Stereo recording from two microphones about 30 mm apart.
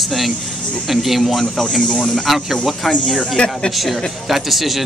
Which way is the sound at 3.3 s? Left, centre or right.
Left.